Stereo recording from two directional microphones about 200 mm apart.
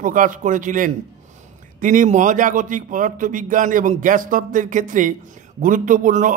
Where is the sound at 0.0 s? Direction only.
40° right (ahead or behind).